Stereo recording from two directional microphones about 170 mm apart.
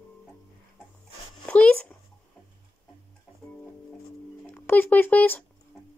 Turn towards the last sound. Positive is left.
turn(degrees=10)  # may be behind; listen again after turning